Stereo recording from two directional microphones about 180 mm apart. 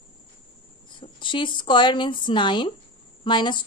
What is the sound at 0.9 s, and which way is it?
A woman's voice, 25° left (ahead or behind).